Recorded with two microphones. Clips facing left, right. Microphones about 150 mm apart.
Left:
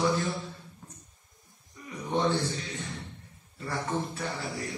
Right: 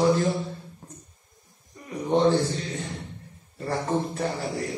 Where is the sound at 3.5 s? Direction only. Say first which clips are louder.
Right 5 dB; 40° right (ahead or behind).